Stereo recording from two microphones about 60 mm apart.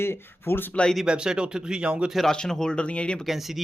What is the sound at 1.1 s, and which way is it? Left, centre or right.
Speech, centre.